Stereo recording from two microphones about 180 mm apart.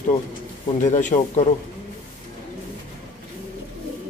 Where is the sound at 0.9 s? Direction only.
40° left (ahead or behind).